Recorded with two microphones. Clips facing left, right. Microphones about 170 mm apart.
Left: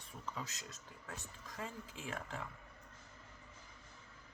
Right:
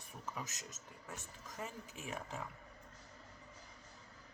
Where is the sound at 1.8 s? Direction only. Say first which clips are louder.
Left 1 dB; 30° left (ahead or behind).